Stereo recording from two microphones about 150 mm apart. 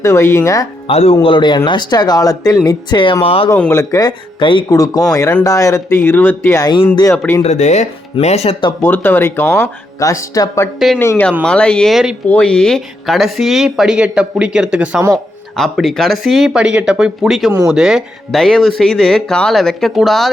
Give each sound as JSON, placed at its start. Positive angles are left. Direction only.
{"t": 0.0, "sound": "speech", "side_deg": 15}
{"t": 0.9, "sound": "speech", "side_deg": 45}
{"t": 1.2, "sound": "speech", "side_deg": 35}
{"t": 3.6, "sound": "speech", "side_deg": 15}
{"t": 7.4, "sound": "speech", "side_deg": 50}
{"t": 8.8, "sound": "speech", "side_deg": 15}
{"t": 10.8, "sound": "speech", "side_deg": -5}
{"t": 11.0, "sound": "speech", "side_deg": 15}
{"t": 11.4, "sound": "speech", "side_deg": 5}